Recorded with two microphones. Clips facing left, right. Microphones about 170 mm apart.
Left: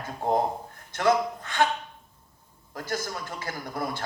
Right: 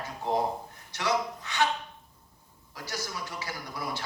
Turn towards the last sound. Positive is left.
turn(degrees=50)  # may be behind; listen again after turning